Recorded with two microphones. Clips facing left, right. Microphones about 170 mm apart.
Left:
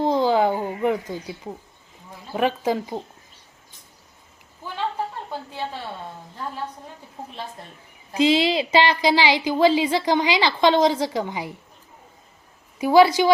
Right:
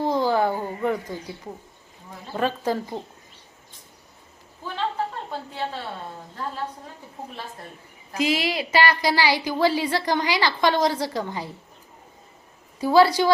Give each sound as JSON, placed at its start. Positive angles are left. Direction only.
{"t": 0.0, "sound": "a sound", "side_deg": 20}
{"t": 2.3, "sound": "speech", "side_deg": 15}
{"t": 8.1, "sound": "a woman's voice", "side_deg": 25}
{"t": 12.8, "sound": "speech", "side_deg": 15}